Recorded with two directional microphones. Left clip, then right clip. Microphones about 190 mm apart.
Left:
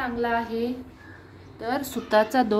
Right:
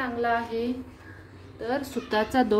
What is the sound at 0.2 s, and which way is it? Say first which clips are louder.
Speech: even; 10° left (ahead or behind).